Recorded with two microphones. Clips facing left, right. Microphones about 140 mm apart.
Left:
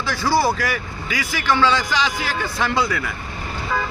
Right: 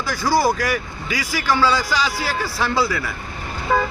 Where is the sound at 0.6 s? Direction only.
40° right (ahead or behind).